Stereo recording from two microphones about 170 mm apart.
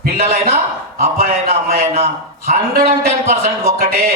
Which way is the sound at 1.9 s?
40° right (ahead or behind).